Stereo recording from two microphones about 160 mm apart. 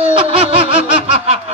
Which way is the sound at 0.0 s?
35° right (ahead or behind).